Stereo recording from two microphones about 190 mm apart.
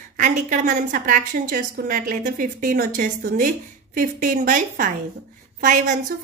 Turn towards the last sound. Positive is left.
turn(degrees=-40)  # may be behind; listen again after turning